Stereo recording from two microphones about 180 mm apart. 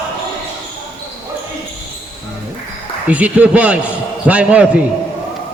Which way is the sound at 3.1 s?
10° right (ahead or behind).